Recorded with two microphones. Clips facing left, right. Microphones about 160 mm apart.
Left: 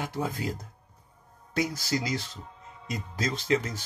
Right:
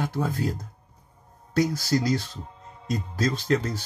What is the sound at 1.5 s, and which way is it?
Speech, 15° left (ahead or behind).